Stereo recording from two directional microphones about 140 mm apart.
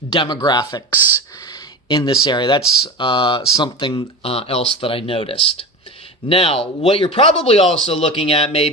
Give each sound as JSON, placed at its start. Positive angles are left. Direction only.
{"t": 0.1, "sound": "speech", "side_deg": 35}
{"t": 1.9, "sound": "speech", "side_deg": 30}